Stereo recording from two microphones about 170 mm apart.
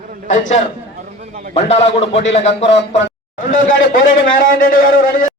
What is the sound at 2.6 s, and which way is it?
Speech, 90° left.